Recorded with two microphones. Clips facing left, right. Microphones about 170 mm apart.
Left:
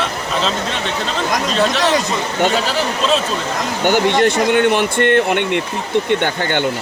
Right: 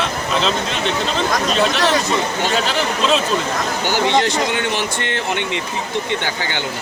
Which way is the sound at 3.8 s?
55° left (ahead or behind).